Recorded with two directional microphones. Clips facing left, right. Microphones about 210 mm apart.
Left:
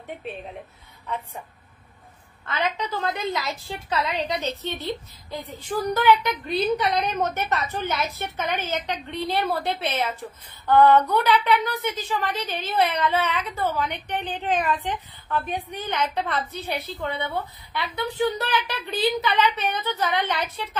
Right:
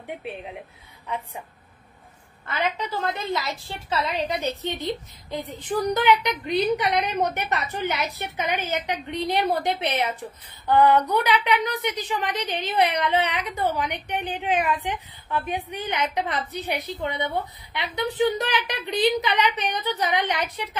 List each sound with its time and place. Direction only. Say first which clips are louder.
0.3 s a woman's voice: even; 10° right (ahead or behind)
2.4 s a woman's voice: even; 10° right (ahead or behind)
4.6 s a woman's voice: right 1 dB; 15° right (ahead or behind)